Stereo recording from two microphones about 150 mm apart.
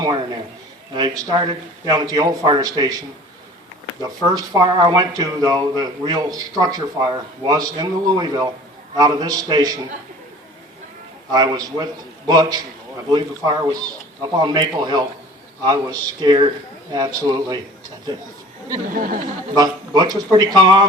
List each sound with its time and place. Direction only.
0.9 s speech: 25° right (ahead or behind)
4.0 s speech: 25° right (ahead or behind)
11.3 s speech: 25° right (ahead or behind)
18.9 s speech: 65° right (ahead or behind)
19.5 s speech: 25° right (ahead or behind)